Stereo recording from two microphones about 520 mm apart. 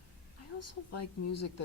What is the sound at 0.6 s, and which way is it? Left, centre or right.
Speech, left.